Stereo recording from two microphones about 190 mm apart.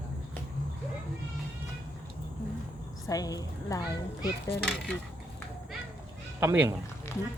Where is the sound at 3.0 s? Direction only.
20° left (ahead or behind).